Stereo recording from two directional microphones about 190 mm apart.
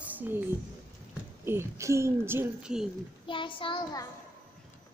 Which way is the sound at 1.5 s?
15° right (ahead or behind).